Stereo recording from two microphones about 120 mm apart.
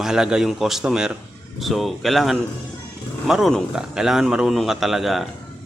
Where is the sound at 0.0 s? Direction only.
5° right (ahead or behind).